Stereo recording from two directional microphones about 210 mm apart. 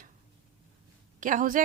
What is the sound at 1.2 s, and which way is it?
Speech, 40° right (ahead or behind).